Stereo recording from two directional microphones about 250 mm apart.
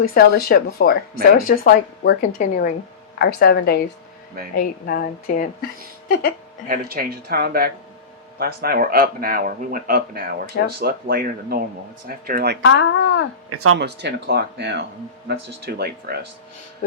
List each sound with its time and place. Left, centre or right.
0.1 s a woman's voice: left
6.7 s speech: right
12.6 s speech: left
13.5 s speech: right
13.7 s speech: right